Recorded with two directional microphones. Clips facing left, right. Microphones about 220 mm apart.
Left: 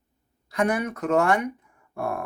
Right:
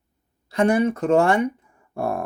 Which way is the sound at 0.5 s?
30° right (ahead or behind).